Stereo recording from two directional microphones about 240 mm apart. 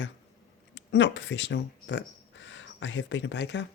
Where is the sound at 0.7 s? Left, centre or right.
Left.